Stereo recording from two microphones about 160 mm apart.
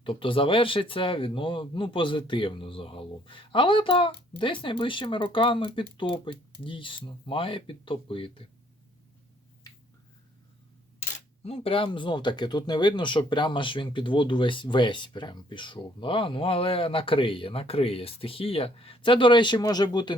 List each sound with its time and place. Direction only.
0.0 s speech: 35° left (ahead or behind)
11.4 s speech: 35° left (ahead or behind)